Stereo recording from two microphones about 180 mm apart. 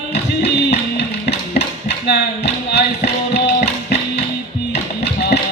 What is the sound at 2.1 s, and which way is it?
Music, 70° left (ahead or behind).